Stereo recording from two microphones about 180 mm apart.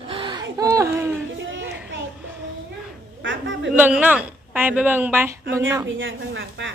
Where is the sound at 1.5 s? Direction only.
90° right.